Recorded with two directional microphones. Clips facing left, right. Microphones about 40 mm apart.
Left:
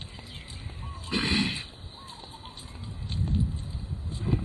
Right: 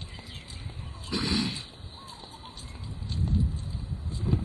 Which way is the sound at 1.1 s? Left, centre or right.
Left.